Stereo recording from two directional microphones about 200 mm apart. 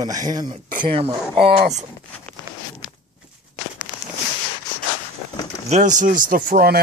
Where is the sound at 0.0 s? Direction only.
20° right (ahead or behind).